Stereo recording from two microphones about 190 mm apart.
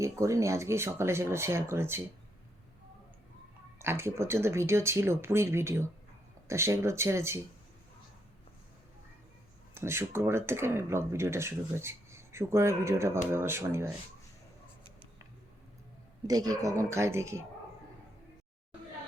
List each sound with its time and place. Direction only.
0.0 s speech: 15° right (ahead or behind)
3.8 s speech: 15° right (ahead or behind)
9.7 s speech: 15° right (ahead or behind)
16.2 s speech: 20° right (ahead or behind)